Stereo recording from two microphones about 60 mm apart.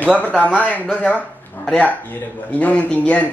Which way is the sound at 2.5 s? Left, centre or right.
Left.